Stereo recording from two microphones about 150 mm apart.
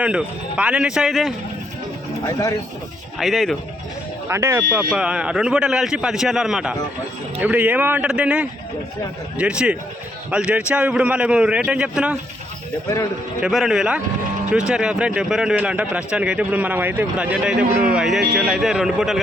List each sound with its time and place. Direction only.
0.0 s speech: 5° right (ahead or behind)
2.2 s speech: 25° left (ahead or behind)
3.2 s a man's voice: centre (ahead or behind)
4.3 s a man's voice: 15° right (ahead or behind)
13.4 s a man's voice: 5° right (ahead or behind)